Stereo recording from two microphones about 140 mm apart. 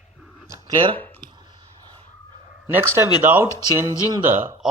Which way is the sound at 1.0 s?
15° left (ahead or behind).